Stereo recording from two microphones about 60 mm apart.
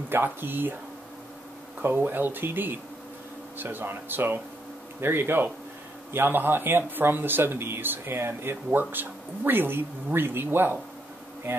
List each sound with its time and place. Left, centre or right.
0.1 s speech: right
1.8 s speech: right